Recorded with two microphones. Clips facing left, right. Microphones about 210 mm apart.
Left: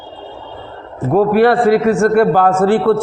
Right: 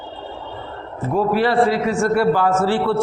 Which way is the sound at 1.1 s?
60° left (ahead or behind).